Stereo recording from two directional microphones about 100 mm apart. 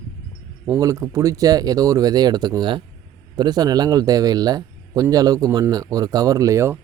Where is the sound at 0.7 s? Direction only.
35° right (ahead or behind).